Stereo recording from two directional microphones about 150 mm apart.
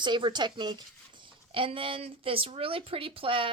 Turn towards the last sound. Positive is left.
turn(degrees=-35)  # may be behind; listen again after turning